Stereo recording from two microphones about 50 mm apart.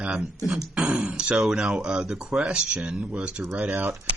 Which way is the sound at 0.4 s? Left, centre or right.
Centre.